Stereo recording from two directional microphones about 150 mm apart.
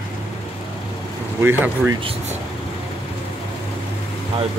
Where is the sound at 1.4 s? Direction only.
15° right (ahead or behind).